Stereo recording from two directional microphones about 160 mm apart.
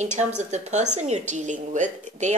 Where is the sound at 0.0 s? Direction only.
45° right (ahead or behind).